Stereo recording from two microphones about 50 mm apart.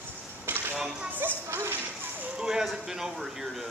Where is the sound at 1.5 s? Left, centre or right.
Right.